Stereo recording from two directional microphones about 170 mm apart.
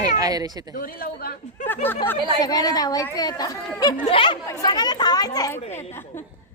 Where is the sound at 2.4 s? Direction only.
25° left (ahead or behind).